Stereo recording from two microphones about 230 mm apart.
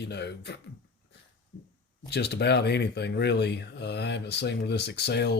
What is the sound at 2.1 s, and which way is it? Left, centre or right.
Speech, left.